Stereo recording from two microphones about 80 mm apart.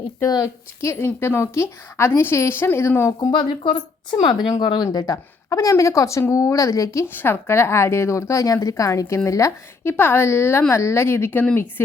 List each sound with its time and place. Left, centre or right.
0.3 s a woman's voice: left
3.3 s speech: left
4.6 s a woman's voice: left
7.0 s a woman's voice: left
10.0 s a woman's voice: left